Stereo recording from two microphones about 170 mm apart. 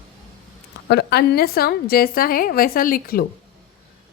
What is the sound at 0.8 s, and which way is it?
A woman's voice, 75° left (ahead or behind).